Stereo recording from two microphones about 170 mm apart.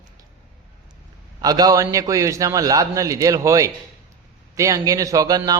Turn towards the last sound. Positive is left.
turn(degrees=-25)  # may be behind; listen again after turning